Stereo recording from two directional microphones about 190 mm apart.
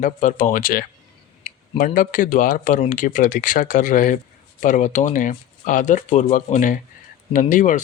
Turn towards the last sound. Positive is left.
turn(degrees=40)  # may be behind; listen again after turning